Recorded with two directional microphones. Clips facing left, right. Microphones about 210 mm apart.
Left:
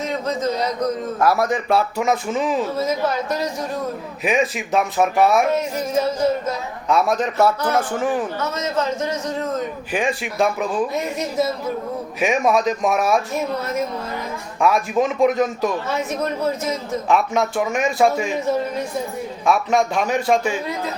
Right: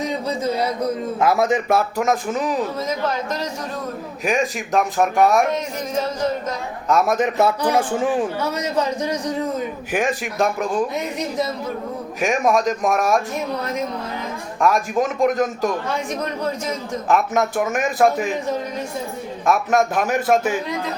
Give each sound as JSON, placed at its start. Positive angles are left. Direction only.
{"t": 0.0, "sound": "speech", "side_deg": -15}
{"t": 1.2, "sound": "a man's voice", "side_deg": -20}
{"t": 2.0, "sound": "speech", "side_deg": 0}
{"t": 7.2, "sound": "a man's voice", "side_deg": -15}
{"t": 14.6, "sound": "speech", "side_deg": 0}
{"t": 17.1, "sound": "speech", "side_deg": 0}
{"t": 19.5, "sound": "speech", "side_deg": -5}